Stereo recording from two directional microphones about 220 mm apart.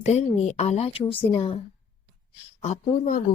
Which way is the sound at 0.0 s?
30° left (ahead or behind).